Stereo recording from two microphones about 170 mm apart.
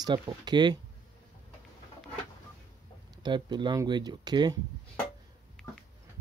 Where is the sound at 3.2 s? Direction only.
25° right (ahead or behind).